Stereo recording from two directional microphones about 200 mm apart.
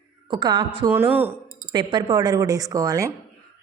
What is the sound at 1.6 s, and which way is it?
Speech, 25° right (ahead or behind).